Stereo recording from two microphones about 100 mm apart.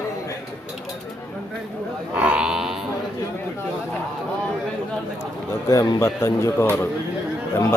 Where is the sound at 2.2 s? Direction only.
10° right (ahead or behind).